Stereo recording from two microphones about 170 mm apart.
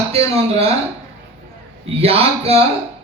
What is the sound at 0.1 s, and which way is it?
Speech, 35° right (ahead or behind).